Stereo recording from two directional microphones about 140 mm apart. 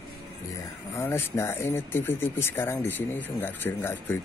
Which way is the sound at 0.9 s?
15° left (ahead or behind).